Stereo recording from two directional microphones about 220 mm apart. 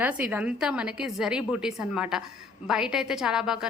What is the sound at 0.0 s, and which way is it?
A woman's voice, 5° right (ahead or behind).